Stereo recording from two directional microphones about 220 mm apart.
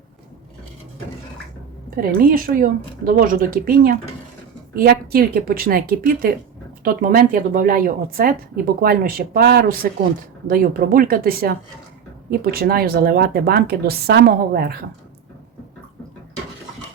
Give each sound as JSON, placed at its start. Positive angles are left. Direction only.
{"t": 2.0, "sound": "speech", "side_deg": -40}